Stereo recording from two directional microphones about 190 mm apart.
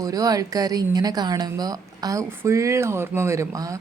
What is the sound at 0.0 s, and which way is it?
A woman's voice, 20° right (ahead or behind).